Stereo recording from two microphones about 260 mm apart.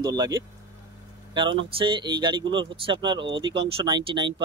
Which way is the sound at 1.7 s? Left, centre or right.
Centre.